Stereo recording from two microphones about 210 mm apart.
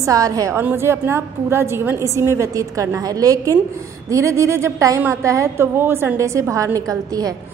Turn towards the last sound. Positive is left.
turn(degrees=-15)  # may be behind; listen again after turning